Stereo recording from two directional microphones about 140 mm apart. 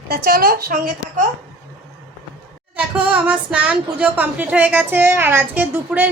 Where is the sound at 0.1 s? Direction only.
90° right.